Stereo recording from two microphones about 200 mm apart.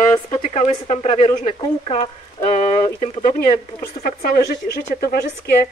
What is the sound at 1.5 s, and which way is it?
Speech, 25° left (ahead or behind).